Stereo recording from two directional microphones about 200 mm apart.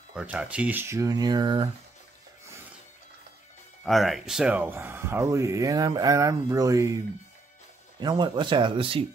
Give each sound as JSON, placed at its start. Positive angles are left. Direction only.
{"t": 0.1, "sound": "speech", "side_deg": -5}
{"t": 3.8, "sound": "speech", "side_deg": 0}
{"t": 8.0, "sound": "speech", "side_deg": -20}